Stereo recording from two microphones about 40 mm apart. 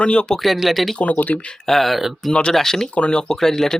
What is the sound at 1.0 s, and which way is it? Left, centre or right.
Speech, left.